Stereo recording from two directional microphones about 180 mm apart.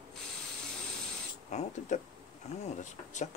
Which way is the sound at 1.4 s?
40° left (ahead or behind).